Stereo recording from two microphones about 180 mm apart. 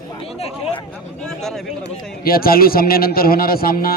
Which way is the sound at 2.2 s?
55° left (ahead or behind).